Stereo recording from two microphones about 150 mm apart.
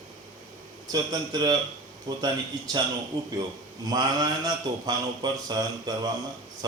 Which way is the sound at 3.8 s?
25° right (ahead or behind).